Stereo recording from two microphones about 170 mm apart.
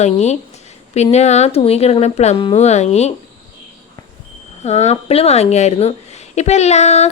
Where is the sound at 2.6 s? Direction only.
40° left (ahead or behind).